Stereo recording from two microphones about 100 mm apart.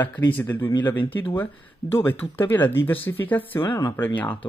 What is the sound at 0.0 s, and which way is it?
Speech, 15° left (ahead or behind).